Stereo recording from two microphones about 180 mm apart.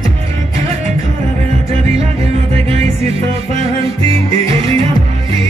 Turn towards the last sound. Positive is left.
turn(degrees=-30)  # may be behind; listen again after turning